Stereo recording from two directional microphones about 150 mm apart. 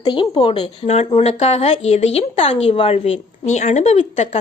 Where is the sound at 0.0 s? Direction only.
30° left (ahead or behind).